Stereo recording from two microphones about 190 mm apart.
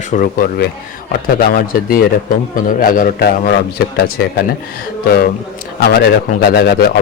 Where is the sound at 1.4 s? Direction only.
50° left (ahead or behind).